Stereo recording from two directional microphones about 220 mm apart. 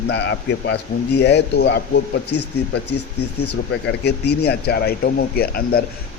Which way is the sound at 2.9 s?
90° left.